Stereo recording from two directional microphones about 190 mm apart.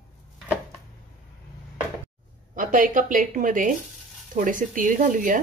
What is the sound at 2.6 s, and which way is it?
A woman's voice, 45° right (ahead or behind).